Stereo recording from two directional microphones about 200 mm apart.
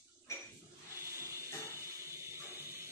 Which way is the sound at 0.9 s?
15° right (ahead or behind).